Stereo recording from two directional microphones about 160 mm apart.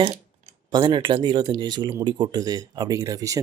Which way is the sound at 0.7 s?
30° right (ahead or behind).